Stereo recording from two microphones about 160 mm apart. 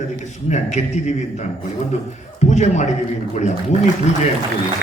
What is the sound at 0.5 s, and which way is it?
A man's voice, 45° left (ahead or behind).